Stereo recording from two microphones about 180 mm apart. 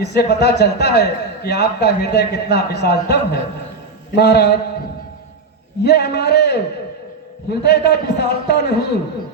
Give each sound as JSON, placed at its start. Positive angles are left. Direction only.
{"t": 0.0, "sound": "a man's voice", "side_deg": 65}
{"t": 5.8, "sound": "a man's voice", "side_deg": 65}